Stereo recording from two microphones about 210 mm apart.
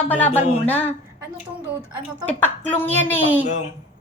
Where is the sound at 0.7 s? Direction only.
10° left (ahead or behind).